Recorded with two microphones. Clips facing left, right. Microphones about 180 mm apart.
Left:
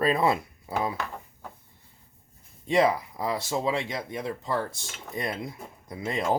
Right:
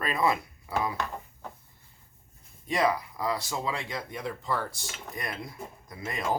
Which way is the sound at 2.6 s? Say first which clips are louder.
Left 4 dB; 25° left (ahead or behind).